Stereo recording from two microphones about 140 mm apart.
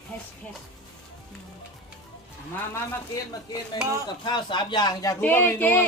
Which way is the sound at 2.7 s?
25° left (ahead or behind).